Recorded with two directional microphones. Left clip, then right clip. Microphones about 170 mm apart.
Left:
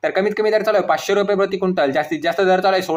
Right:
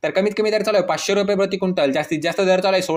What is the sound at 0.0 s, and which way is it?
Speech, 40° right (ahead or behind).